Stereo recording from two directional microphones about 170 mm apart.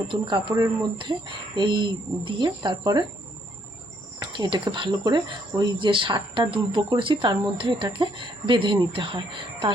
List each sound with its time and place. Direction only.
0.1 s speech: 25° right (ahead or behind)
4.2 s speech: 25° right (ahead or behind)